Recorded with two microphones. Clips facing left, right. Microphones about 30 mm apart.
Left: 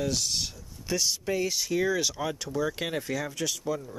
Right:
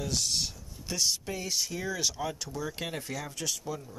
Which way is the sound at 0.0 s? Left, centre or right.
Centre.